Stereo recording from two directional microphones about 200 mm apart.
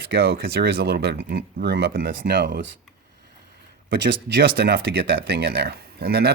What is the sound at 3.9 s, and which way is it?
Speech, 60° right (ahead or behind).